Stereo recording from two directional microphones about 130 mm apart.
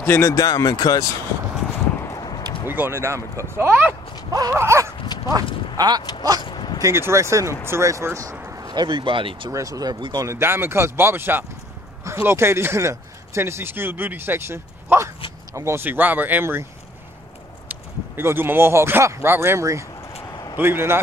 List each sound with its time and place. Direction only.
0.0 s speech: 15° left (ahead or behind)
2.0 s clip-clop: 30° left (ahead or behind)
2.7 s speech: 15° right (ahead or behind)
4.3 s speech: 25° right (ahead or behind)
4.9 s dog: 30° left (ahead or behind)
5.8 s speech: 30° right (ahead or behind)
6.4 s a sound: 35° left (ahead or behind)
6.8 s speech: 20° right (ahead or behind); by 9.5 s 40° right (ahead or behind)
9.5 s speech: 25° right (ahead or behind)
17.6 s speech: 15° right (ahead or behind)